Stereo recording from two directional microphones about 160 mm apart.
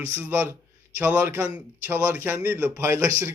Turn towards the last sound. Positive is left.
turn(degrees=-20)  # may be behind; listen again after turning